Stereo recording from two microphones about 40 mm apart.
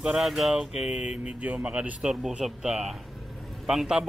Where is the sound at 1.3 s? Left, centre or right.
Right.